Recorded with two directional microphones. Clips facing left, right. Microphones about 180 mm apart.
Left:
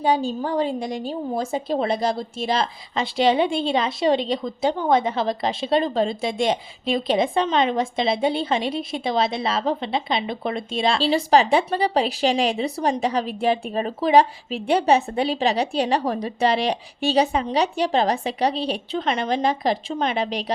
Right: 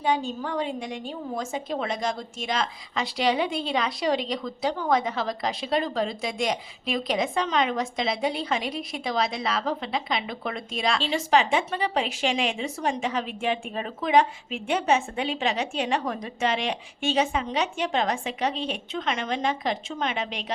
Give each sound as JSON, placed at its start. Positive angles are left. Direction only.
{"t": 0.0, "sound": "a woman's voice", "side_deg": 35}